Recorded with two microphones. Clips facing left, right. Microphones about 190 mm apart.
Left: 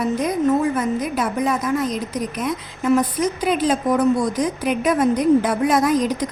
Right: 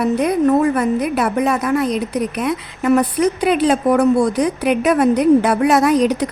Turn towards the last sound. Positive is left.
turn(degrees=-70)  # may be behind; listen again after turning